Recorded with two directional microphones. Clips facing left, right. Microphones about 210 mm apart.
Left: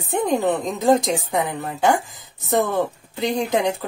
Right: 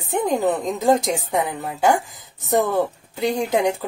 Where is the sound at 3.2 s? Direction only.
10° right (ahead or behind).